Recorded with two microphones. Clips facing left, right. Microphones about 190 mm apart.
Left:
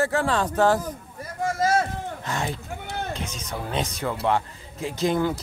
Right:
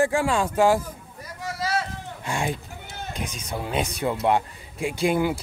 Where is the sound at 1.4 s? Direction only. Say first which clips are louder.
Left 5 dB; 50° left (ahead or behind).